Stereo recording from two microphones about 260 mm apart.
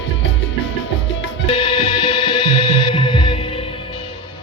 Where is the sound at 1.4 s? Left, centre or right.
Left.